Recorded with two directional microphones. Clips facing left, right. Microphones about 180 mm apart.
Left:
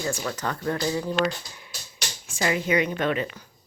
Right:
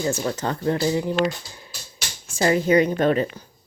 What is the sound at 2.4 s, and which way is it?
A woman's voice, 40° right (ahead or behind).